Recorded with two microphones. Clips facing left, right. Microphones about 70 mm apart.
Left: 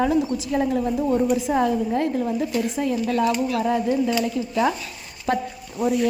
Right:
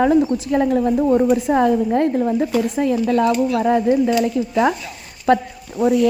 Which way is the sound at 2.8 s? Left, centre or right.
Right.